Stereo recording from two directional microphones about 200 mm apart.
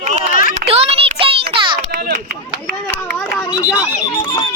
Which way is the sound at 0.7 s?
30° right (ahead or behind).